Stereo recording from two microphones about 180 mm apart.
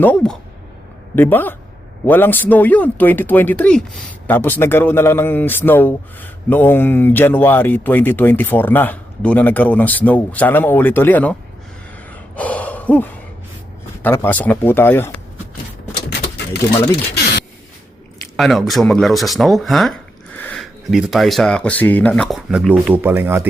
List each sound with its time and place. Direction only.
0.0 s speech: 5° left (ahead or behind)
12.4 s gasp: 10° left (ahead or behind)
14.0 s speech: 10° left (ahead or behind)
18.3 s speech: centre (ahead or behind)